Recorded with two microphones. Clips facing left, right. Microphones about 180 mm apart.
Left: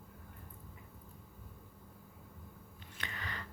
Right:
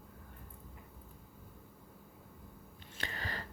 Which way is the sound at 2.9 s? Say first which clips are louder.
Right 3 dB; 35° right (ahead or behind).